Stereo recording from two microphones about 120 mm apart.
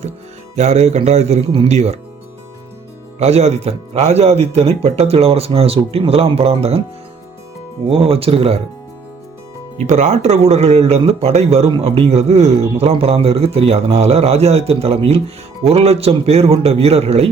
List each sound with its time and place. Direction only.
0.5 s speech: 65° right (ahead or behind)
3.2 s speech: 65° right (ahead or behind)
7.9 s speech: 55° right (ahead or behind)
9.8 s speech: 75° right (ahead or behind)